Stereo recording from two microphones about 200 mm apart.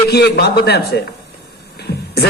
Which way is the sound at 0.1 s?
55° left (ahead or behind).